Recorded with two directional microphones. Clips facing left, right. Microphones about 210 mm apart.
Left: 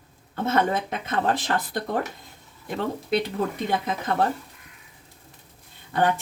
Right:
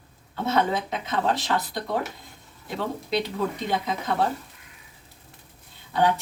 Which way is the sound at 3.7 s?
55° left (ahead or behind).